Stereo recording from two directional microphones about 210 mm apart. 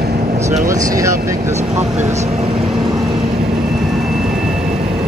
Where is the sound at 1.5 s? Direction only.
30° right (ahead or behind).